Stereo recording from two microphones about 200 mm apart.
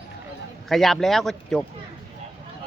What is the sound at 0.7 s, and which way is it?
Speech, centre (ahead or behind).